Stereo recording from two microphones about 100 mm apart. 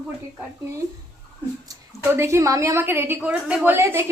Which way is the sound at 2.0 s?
25° right (ahead or behind).